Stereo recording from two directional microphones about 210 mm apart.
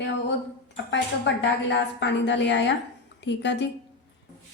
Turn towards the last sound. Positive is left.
turn(degrees=55)  # may be behind; listen again after turning